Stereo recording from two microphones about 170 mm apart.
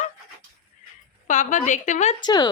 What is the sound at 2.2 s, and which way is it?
Speech, 25° left (ahead or behind).